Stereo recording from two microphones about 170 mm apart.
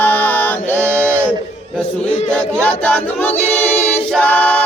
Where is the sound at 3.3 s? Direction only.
40° left (ahead or behind).